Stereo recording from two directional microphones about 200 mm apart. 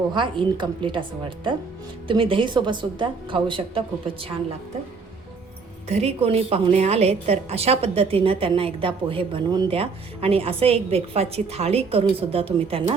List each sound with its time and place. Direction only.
0.1 s a woman's voice: 25° right (ahead or behind)
2.0 s a woman's voice: 25° right (ahead or behind)
5.9 s a woman's voice: 30° right (ahead or behind)